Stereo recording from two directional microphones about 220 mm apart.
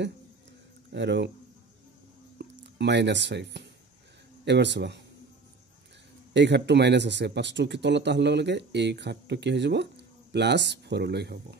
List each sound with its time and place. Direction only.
0.9 s speech: 55° right (ahead or behind)
2.3 s speech: 50° right (ahead or behind)
6.3 s speech: 50° right (ahead or behind)